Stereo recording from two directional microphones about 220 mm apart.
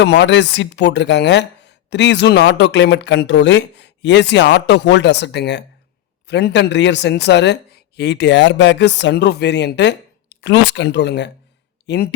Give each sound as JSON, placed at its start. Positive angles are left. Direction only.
{"t": 0.0, "sound": "speech", "side_deg": 50}